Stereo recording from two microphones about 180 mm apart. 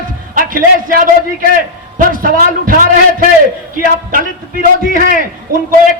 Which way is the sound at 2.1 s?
50° right (ahead or behind).